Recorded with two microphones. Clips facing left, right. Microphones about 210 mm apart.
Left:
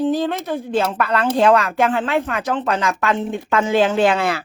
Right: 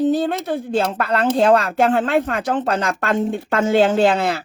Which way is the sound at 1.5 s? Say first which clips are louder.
Right 1 dB; 40° right (ahead or behind).